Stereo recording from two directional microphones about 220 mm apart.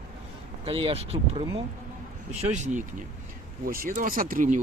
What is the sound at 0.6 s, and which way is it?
Speech, 25° right (ahead or behind).